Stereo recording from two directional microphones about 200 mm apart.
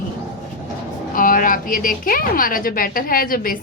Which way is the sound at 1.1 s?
45° left (ahead or behind).